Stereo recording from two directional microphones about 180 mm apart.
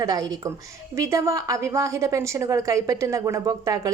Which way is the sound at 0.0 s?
20° right (ahead or behind).